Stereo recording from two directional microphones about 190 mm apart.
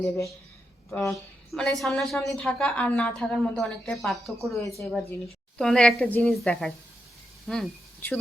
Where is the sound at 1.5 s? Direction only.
Centre (ahead or behind).